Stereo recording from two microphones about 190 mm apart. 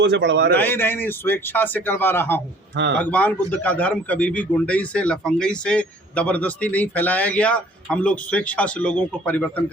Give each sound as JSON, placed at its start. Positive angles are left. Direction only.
{"t": 0.0, "sound": "a man's voice", "side_deg": -70}
{"t": 0.5, "sound": "a man's voice", "side_deg": 10}
{"t": 2.7, "sound": "a man's voice", "side_deg": -70}
{"t": 3.0, "sound": "a man's voice", "side_deg": 10}